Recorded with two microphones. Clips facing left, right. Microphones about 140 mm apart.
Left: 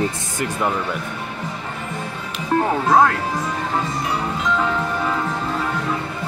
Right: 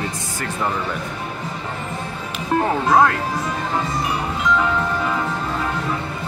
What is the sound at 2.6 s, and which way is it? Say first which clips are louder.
Speech: even; centre (ahead or behind).